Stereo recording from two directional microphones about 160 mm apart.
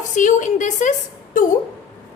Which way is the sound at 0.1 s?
50° left (ahead or behind).